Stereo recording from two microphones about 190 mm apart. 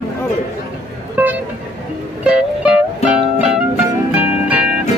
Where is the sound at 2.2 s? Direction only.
5° right (ahead or behind).